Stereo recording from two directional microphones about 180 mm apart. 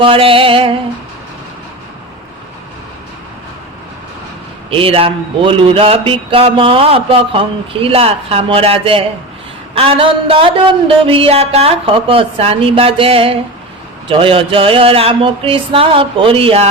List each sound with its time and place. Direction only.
0.0 s speech: 30° right (ahead or behind)
4.7 s speech: 30° right (ahead or behind)